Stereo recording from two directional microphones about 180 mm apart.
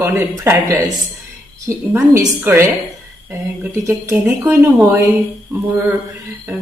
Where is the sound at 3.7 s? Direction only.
15° right (ahead or behind).